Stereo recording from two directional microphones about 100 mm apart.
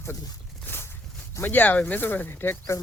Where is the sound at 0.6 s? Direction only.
25° left (ahead or behind).